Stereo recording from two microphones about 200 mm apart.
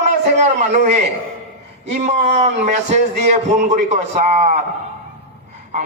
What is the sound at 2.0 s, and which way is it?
A man's voice, 30° right (ahead or behind).